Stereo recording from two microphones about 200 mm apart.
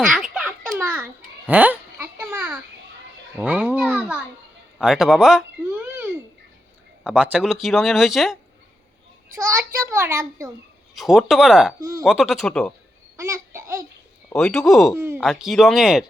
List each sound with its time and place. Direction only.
0.1 s babbling: 5° right (ahead or behind)
4.8 s a sound: centre (ahead or behind)
7.0 s speech: 5° right (ahead or behind)
9.3 s a child's voice: 15° right (ahead or behind)
10.9 s speech: centre (ahead or behind)
11.8 s a child's voice: 15° right (ahead or behind)
12.0 s speech: centre (ahead or behind)
13.1 s babbling: 15° right (ahead or behind)
14.3 s speech: 5° left (ahead or behind)
14.9 s a child's voice: 10° right (ahead or behind)
15.2 s speech: centre (ahead or behind)